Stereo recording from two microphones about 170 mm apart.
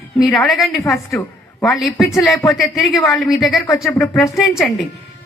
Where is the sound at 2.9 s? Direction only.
20° left (ahead or behind).